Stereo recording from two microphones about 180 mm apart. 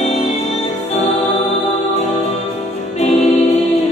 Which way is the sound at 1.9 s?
35° left (ahead or behind).